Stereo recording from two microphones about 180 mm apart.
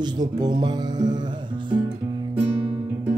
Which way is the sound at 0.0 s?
25° right (ahead or behind).